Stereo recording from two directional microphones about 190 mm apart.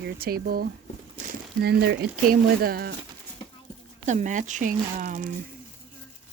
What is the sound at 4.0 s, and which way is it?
Speech, 40° right (ahead or behind).